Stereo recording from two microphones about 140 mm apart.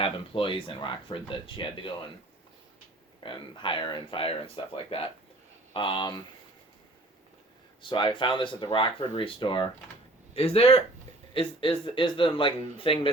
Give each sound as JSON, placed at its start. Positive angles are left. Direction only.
{"t": 0.0, "sound": "speech", "side_deg": 40}
{"t": 3.2, "sound": "speech", "side_deg": 35}
{"t": 7.8, "sound": "speech", "side_deg": 35}